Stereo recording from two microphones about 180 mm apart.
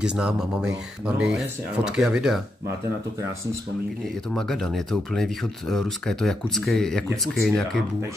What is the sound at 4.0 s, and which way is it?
Speech, centre (ahead or behind).